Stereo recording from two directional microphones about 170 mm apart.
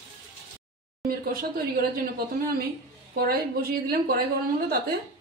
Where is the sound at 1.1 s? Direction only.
60° right (ahead or behind).